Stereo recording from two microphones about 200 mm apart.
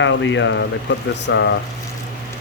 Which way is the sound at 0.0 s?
65° left (ahead or behind).